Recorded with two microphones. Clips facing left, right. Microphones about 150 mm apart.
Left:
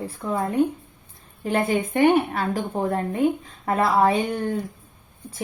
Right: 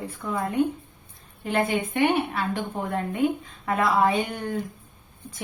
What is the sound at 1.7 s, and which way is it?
A woman's voice, 45° left (ahead or behind).